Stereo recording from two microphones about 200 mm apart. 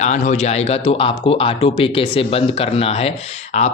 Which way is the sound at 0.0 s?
35° left (ahead or behind).